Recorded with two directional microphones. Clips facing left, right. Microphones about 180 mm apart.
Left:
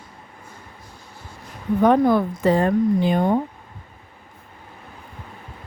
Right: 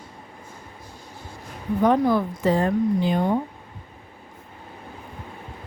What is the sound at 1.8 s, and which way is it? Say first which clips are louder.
A woman's voice: left 3 dB; 60° left (ahead or behind).